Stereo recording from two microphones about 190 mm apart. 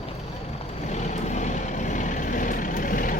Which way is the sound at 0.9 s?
35° left (ahead or behind).